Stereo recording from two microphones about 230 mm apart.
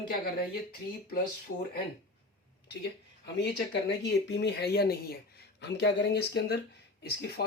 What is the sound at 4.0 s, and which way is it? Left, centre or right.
Speech, left.